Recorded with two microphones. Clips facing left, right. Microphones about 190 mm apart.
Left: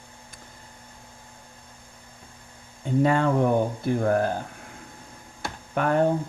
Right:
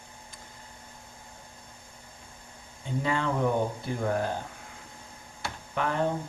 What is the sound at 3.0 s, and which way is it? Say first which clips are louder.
Speech: left 5 dB; 50° left (ahead or behind).